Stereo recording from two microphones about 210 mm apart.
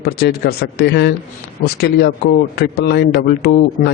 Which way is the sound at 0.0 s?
50° left (ahead or behind).